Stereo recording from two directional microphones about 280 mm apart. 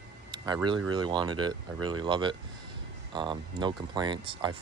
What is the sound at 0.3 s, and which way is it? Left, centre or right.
Speech, centre.